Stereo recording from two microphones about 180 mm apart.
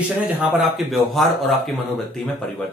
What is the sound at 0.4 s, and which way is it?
Speech, 5° right (ahead or behind).